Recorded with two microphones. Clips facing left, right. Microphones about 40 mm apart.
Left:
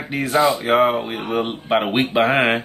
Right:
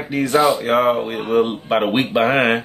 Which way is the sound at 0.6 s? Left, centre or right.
Centre.